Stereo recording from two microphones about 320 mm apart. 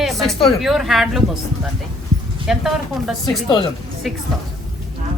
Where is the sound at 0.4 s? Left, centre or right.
Centre.